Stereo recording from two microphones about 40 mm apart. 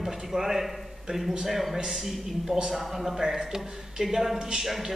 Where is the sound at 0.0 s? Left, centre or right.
Centre.